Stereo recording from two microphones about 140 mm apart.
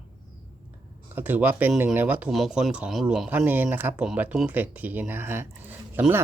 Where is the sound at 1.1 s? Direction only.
10° right (ahead or behind).